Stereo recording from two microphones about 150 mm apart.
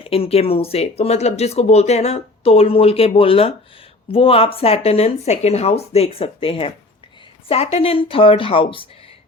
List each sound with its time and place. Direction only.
0.0 s speech: 40° left (ahead or behind)